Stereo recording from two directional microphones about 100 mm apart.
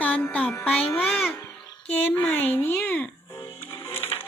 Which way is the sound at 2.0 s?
20° left (ahead or behind).